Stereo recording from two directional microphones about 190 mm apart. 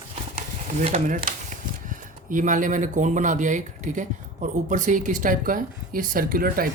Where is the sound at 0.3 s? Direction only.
35° right (ahead or behind).